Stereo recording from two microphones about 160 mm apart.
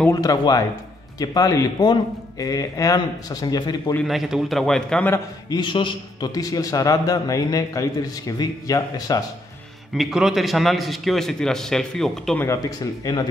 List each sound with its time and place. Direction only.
0.1 s a man's voice: 25° left (ahead or behind)
3.9 s a man's voice: centre (ahead or behind)
5.1 s a man's voice: 25° left (ahead or behind)
9.9 s a man's voice: 5° right (ahead or behind)
12.4 s a man's voice: 20° left (ahead or behind)